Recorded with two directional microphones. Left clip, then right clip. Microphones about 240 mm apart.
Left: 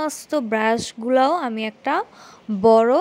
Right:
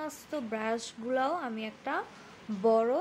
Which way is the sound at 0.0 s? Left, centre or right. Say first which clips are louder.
Left 14 dB; left.